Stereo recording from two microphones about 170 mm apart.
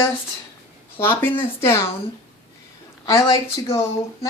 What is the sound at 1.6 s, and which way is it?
Speech, 15° left (ahead or behind).